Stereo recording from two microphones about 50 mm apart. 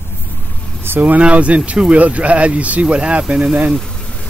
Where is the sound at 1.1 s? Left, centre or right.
Right; by 3.6 s centre.